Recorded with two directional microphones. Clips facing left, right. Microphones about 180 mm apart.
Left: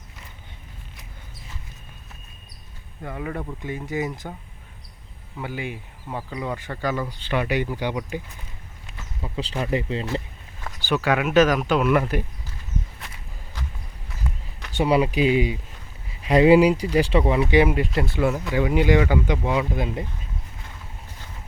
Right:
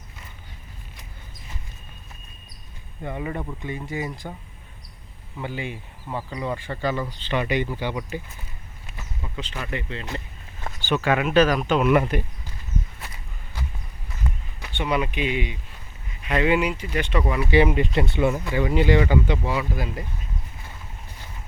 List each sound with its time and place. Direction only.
3.0 s speech: 5° right (ahead or behind)
3.7 s speech: 5° left (ahead or behind)
5.4 s speech: 10° left (ahead or behind)
9.2 s speech: 30° left (ahead or behind)
10.9 s speech: 10° left (ahead or behind)
14.7 s speech: 35° left (ahead or behind)
17.5 s speech: 10° left (ahead or behind)